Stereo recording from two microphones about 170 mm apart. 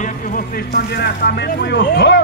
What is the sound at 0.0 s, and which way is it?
Speech, 55° left (ahead or behind).